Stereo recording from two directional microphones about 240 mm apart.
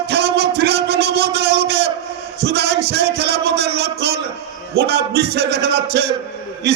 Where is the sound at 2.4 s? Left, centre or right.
Right.